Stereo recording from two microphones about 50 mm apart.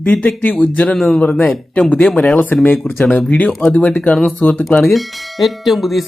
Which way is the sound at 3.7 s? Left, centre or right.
Left.